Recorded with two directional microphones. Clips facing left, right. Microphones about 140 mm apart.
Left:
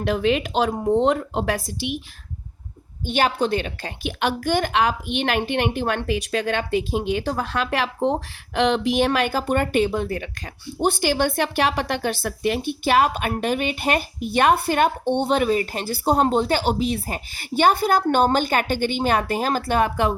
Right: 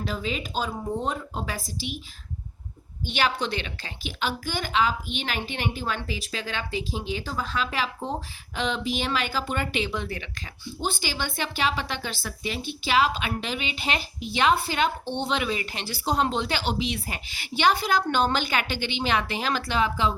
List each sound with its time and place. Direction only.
0.0 s speech: 65° left (ahead or behind)
3.1 s a woman's voice: 50° left (ahead or behind)
10.8 s speech: 60° left (ahead or behind)